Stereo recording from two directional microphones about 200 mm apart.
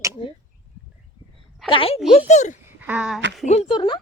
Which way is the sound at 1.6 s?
25° left (ahead or behind).